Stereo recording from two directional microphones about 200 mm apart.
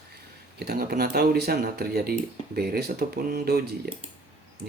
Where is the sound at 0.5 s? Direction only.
50° right (ahead or behind).